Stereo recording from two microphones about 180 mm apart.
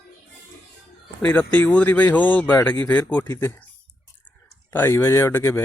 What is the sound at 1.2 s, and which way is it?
Speech, 5° left (ahead or behind).